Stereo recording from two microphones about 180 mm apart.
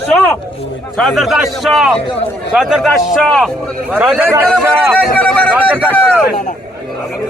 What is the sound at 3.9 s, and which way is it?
Speech, 5° right (ahead or behind).